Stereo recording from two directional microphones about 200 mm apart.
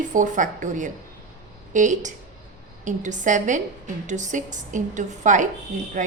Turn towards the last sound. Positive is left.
turn(degrees=-40)  # may be behind; listen again after turning